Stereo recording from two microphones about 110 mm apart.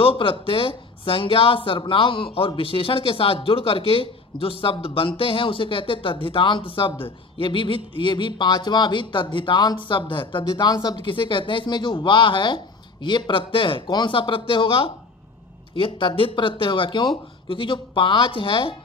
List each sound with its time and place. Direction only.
0.0 s speech: 55° left (ahead or behind)
10.7 s speech: 40° left (ahead or behind)